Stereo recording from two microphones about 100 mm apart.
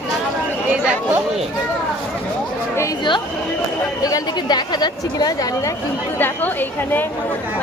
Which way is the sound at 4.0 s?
40° left (ahead or behind).